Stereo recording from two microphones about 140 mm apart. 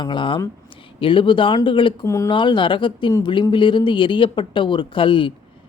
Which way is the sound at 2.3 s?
35° left (ahead or behind).